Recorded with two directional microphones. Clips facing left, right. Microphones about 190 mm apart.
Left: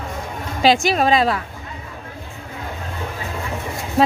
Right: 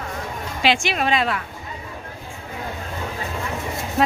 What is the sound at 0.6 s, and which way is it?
Speech, 40° left (ahead or behind).